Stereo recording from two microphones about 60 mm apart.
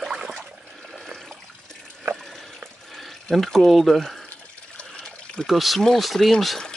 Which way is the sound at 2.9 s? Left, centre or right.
Centre.